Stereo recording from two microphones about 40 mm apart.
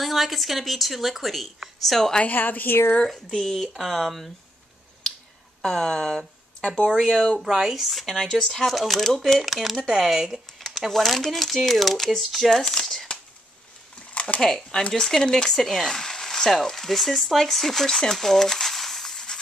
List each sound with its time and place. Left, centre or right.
0.0 s speech: centre
2.2 s a woman's voice: left
3.3 s speech: centre
3.7 s speech: centre
5.6 s speech: centre
7.3 s speech: centre
10.9 s speech: centre
12.4 s speech: centre
14.4 s speech: centre
15.5 s speech: centre
18.1 s a sound: centre